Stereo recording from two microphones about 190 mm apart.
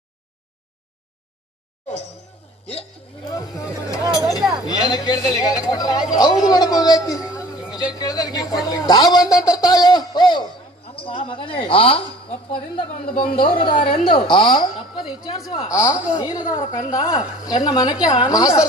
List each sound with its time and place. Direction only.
3.2 s speech: 20° left (ahead or behind)
4.4 s chink: centre (ahead or behind)
4.6 s a man's voice: 20° left (ahead or behind)
7.3 s a sound: 20° left (ahead or behind)
7.9 s a man's voice: 20° left (ahead or behind)
12.9 s a woman's voice: 50° left (ahead or behind)
13.3 s a man's voice: 25° left (ahead or behind)